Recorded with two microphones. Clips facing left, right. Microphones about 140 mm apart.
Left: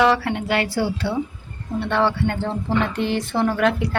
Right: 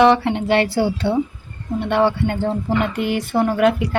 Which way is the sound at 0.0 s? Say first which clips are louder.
Right 4 dB; 25° right (ahead or behind).